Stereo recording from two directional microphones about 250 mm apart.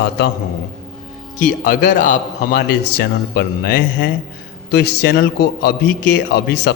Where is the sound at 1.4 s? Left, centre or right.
Left.